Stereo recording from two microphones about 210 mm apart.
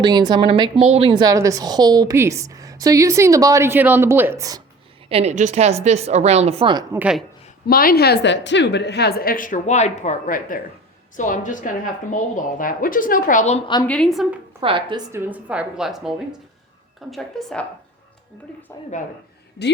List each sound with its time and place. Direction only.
0.0 s speech: 20° right (ahead or behind)
1.2 s a woman's voice: 15° right (ahead or behind)
5.0 s a woman's voice: 30° right (ahead or behind)
7.0 s a woman's voice: 5° right (ahead or behind)
7.7 s a woman's voice: 45° left (ahead or behind)
13.8 s a woman's voice: 5° left (ahead or behind)
14.6 s speech: 25° right (ahead or behind)
15.1 s a woman's voice: 10° right (ahead or behind)